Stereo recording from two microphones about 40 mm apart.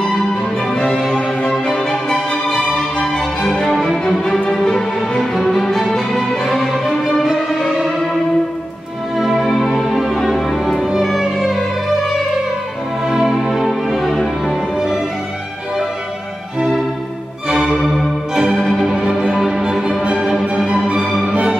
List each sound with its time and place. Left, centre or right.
0.8 s music: centre
2.2 s music: left
3.4 s music: centre
7.2 s music: centre
9.2 s music: centre
13.0 s music: centre
17.7 s music: centre
18.3 s music: right